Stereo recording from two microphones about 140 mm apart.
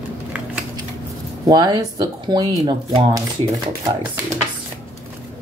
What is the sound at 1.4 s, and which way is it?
Speech, 30° right (ahead or behind).